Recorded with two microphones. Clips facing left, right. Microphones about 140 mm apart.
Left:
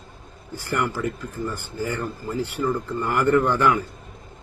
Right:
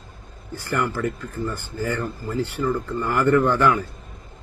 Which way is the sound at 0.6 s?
15° left (ahead or behind).